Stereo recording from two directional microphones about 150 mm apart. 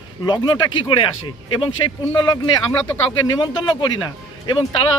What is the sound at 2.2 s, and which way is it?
Speech, 30° left (ahead or behind).